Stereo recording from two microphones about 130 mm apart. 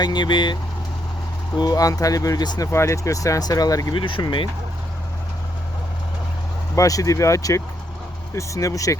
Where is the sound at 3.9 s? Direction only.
40° left (ahead or behind).